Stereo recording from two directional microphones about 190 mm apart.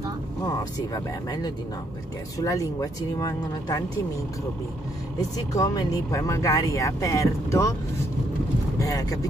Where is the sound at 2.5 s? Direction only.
15° left (ahead or behind).